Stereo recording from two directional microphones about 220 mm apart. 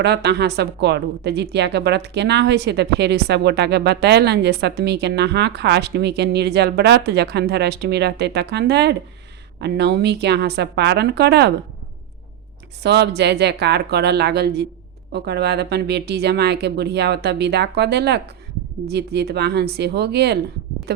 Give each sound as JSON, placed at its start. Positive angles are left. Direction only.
{"t": 0.0, "sound": "a woman's voice", "side_deg": -50}
{"t": 12.8, "sound": "a woman's voice", "side_deg": -50}